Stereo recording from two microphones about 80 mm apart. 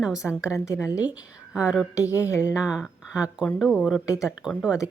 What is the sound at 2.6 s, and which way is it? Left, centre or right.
A woman's voice, centre.